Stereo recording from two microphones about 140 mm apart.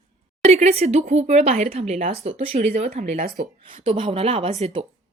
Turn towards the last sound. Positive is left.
turn(degrees=-45)  # may be behind; listen again after turning